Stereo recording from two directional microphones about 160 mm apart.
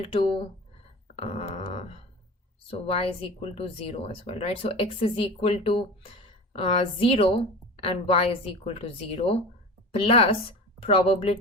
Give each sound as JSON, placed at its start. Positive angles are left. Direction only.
{"t": 0.0, "sound": "speech", "side_deg": 35}
{"t": 1.1, "sound": "a sound", "side_deg": 40}
{"t": 2.6, "sound": "speech", "side_deg": 35}